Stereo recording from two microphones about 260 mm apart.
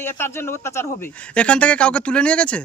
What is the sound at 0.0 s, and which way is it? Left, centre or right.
Speech, centre.